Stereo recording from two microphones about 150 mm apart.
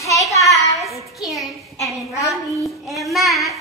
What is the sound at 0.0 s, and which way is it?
Child singing, 20° left (ahead or behind).